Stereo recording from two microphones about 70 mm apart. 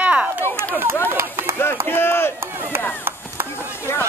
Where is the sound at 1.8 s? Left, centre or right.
Left.